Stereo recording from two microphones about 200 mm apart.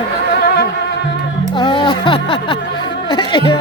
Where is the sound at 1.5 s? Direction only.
20° left (ahead or behind).